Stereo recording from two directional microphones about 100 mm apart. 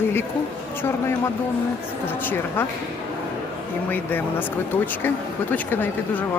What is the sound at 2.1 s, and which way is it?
Speech, 20° left (ahead or behind).